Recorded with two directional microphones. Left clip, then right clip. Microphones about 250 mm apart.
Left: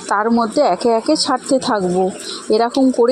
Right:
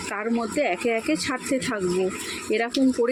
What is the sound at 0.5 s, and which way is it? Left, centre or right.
Speech, centre.